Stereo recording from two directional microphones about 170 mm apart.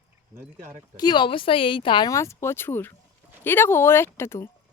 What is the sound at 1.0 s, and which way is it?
A woman's voice, 25° left (ahead or behind).